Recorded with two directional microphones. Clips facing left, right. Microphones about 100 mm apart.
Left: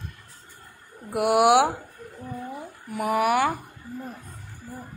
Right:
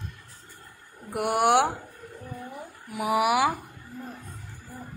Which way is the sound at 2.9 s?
5° right (ahead or behind).